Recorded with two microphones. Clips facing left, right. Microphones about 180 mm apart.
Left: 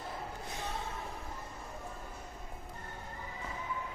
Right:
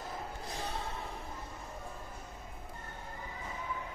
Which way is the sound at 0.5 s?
35° right (ahead or behind).